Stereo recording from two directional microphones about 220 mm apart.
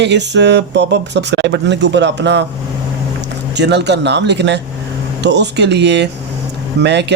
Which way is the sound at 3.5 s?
50° right (ahead or behind).